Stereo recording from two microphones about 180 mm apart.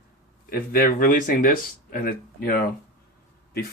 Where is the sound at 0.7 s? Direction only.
50° left (ahead or behind).